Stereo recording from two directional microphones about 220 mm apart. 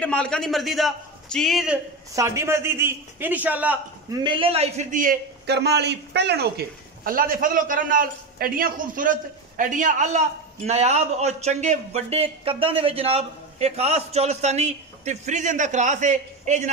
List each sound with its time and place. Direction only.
0.0 s a man's voice: 5° left (ahead or behind)
2.1 s a man's voice: 10° right (ahead or behind)
4.2 s a man's voice: 25° right (ahead or behind)